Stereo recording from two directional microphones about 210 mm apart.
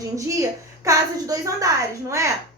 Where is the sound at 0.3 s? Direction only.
15° right (ahead or behind).